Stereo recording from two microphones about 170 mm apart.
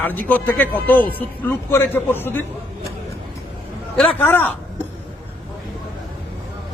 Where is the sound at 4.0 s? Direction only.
10° left (ahead or behind).